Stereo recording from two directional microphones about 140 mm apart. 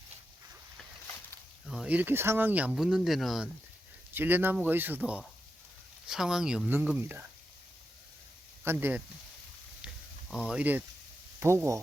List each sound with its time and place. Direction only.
1.6 s speech: 5° right (ahead or behind)
4.1 s speech: 15° right (ahead or behind)
8.6 s speech: 15° right (ahead or behind)
9.8 s a sound: 5° right (ahead or behind)
11.3 s speech: 20° right (ahead or behind)